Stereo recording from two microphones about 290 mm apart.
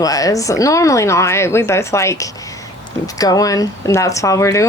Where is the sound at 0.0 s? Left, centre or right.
Centre.